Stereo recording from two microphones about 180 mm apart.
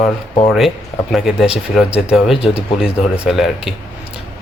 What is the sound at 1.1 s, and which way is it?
Speech, centre (ahead or behind).